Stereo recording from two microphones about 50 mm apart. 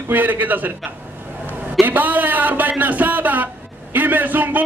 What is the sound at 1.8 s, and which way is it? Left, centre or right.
A man's voice, right.